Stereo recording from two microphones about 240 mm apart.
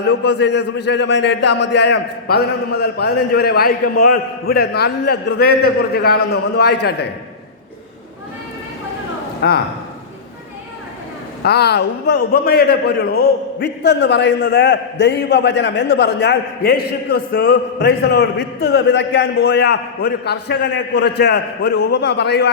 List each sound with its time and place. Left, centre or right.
0.1 s a man's voice: left
1.5 s a man's voice: left
1.7 s a man's voice: left
9.4 s a man's voice: left
11.4 s a man's voice: left